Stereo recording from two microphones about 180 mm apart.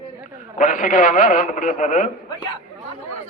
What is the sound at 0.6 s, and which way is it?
A man's voice, 45° left (ahead or behind).